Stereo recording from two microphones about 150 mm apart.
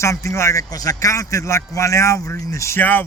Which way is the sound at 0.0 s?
20° left (ahead or behind).